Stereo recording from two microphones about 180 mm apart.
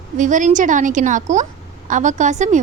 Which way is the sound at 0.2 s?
45° right (ahead or behind).